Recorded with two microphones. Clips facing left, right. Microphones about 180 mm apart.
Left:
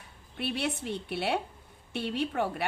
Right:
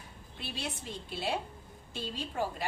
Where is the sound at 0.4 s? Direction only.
65° left (ahead or behind).